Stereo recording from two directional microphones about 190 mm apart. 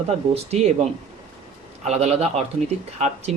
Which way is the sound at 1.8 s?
35° right (ahead or behind).